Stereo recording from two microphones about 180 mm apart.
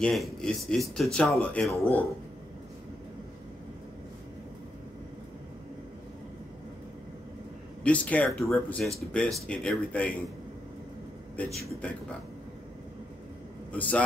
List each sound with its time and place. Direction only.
0.0 s speech: centre (ahead or behind)
7.8 s speech: 10° left (ahead or behind)
11.4 s speech: 10° left (ahead or behind)
13.7 s a man's voice: 5° left (ahead or behind)